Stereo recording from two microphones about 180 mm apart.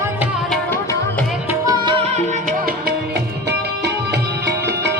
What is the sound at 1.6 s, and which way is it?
Music, 20° right (ahead or behind).